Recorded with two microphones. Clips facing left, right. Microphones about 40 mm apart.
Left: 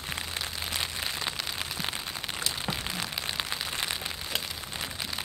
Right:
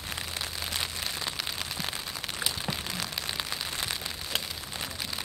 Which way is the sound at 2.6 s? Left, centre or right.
Centre.